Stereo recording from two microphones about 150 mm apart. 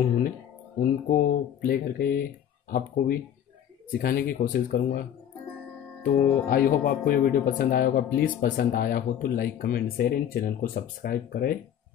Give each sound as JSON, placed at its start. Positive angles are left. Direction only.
{"t": 0.7, "sound": "speech", "side_deg": 70}
{"t": 6.5, "sound": "speech", "side_deg": 80}